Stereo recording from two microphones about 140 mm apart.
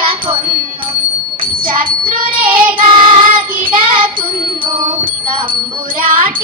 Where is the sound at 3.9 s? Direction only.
35° right (ahead or behind).